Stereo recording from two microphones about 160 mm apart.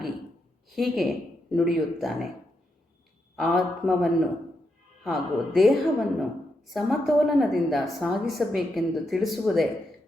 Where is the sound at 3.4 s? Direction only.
Centre (ahead or behind).